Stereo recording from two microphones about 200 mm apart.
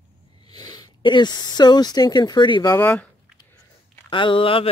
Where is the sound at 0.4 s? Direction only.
20° left (ahead or behind).